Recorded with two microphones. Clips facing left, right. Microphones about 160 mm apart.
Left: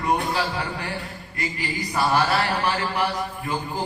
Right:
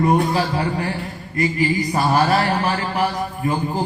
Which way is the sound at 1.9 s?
35° right (ahead or behind).